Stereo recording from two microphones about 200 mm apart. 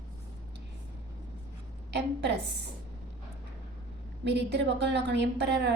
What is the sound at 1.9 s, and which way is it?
Speech, 60° right (ahead or behind).